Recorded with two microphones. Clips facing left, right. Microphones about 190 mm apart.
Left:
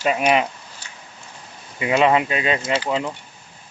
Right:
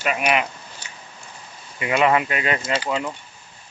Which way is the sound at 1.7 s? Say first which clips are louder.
Left 2 dB; 20° left (ahead or behind).